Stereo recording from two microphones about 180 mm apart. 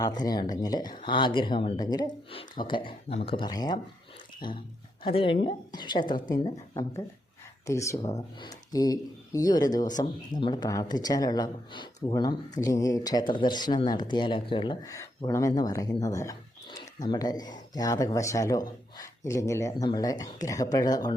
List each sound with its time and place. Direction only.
0.0 s speech: 20° left (ahead or behind)